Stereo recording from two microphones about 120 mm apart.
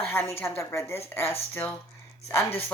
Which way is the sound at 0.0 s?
20° left (ahead or behind).